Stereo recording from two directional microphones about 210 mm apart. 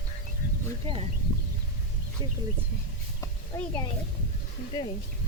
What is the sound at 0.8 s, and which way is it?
Speech, 30° right (ahead or behind).